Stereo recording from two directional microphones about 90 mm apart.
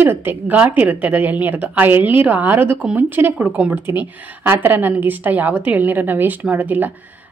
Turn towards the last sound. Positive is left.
turn(degrees=-20)  # may be behind; listen again after turning